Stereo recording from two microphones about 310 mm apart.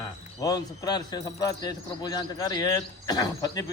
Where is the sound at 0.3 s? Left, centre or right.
Centre.